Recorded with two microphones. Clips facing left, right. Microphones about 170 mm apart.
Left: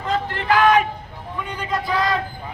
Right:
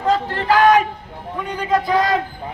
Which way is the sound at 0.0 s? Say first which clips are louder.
Right 5 dB; 40° right (ahead or behind).